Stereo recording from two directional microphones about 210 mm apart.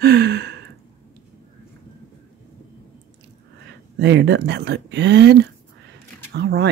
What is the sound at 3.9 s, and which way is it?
Speech, 55° right (ahead or behind).